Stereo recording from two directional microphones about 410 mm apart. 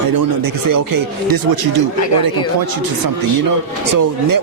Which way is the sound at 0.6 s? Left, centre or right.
Right.